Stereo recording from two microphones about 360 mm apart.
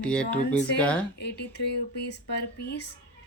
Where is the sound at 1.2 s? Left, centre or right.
Left.